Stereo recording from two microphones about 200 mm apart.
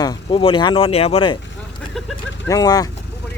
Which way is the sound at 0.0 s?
20° left (ahead or behind).